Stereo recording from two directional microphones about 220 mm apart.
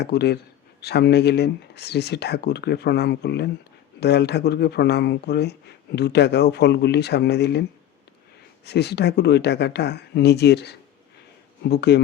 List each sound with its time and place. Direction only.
0.0 s speech: 50° left (ahead or behind)
8.6 s speech: 50° left (ahead or behind)